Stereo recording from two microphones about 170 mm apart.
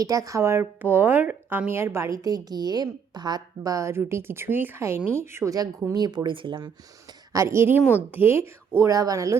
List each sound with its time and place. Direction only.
0.0 s speech: 20° right (ahead or behind)
7.3 s speech: 15° right (ahead or behind)